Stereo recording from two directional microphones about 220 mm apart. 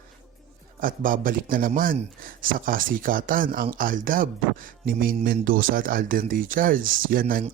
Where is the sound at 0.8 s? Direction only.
40° right (ahead or behind).